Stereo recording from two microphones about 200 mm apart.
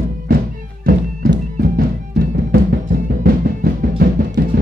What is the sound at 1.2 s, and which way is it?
Music, 45° right (ahead or behind).